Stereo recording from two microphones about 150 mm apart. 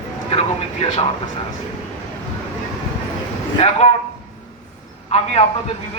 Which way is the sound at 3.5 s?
45° left (ahead or behind).